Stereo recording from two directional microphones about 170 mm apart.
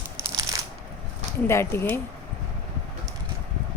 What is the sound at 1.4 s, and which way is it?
Speech, 15° left (ahead or behind).